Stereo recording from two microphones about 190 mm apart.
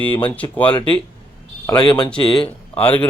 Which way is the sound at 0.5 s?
10° left (ahead or behind).